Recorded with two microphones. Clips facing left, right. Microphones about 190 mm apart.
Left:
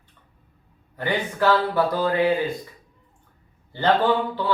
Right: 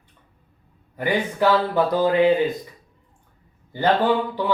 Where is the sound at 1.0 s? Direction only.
15° right (ahead or behind).